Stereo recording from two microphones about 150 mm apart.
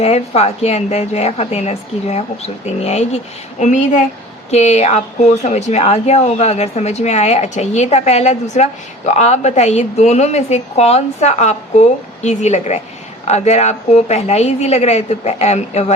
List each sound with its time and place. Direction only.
0.0 s speech: 45° left (ahead or behind)